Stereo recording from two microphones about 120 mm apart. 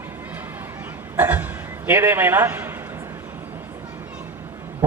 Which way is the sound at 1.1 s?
15° right (ahead or behind).